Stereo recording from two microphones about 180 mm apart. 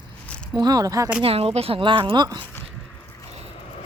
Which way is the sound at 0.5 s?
20° right (ahead or behind).